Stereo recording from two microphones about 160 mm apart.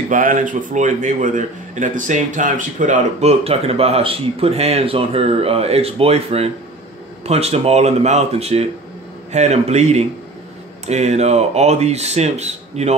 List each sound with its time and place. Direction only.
0.1 s a man's voice: 55° right (ahead or behind)